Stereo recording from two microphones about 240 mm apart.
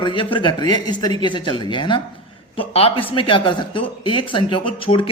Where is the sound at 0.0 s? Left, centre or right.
Left.